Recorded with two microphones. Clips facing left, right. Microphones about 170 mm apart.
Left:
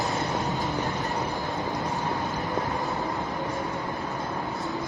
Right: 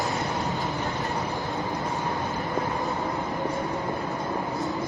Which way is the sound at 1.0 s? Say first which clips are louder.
Even; centre (ahead or behind).